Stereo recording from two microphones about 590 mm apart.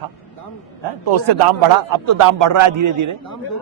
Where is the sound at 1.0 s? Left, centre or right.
Right.